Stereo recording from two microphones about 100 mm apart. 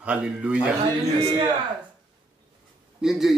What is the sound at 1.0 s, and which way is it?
Speech, 40° right (ahead or behind).